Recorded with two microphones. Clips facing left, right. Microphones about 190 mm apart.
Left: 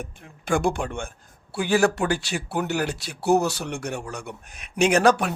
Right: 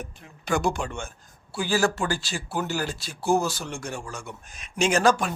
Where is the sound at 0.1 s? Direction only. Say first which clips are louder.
Left 2 dB; 50° left (ahead or behind).